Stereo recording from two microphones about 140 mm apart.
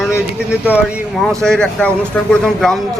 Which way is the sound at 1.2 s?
5° left (ahead or behind).